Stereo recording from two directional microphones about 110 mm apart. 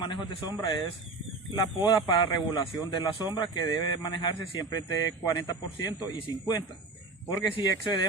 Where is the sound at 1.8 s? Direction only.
45° left (ahead or behind).